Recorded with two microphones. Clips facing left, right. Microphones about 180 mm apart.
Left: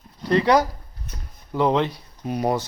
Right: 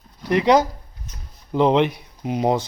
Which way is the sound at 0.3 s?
15° right (ahead or behind).